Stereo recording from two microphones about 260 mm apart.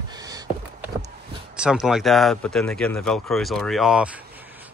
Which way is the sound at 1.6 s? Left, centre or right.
Centre.